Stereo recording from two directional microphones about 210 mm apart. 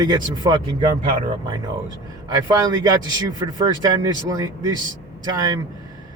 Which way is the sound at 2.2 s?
20° right (ahead or behind).